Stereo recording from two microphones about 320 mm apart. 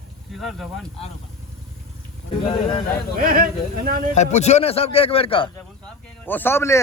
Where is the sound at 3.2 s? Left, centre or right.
Right.